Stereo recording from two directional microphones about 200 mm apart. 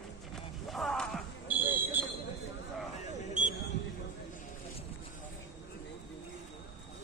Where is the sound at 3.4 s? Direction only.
40° right (ahead or behind).